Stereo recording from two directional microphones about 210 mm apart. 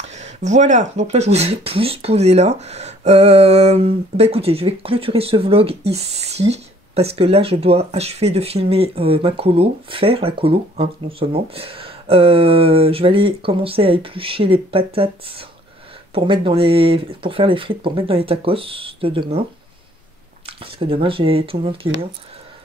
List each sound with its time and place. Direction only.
0.1 s speech: 35° right (ahead or behind)
20.4 s speech: 25° right (ahead or behind)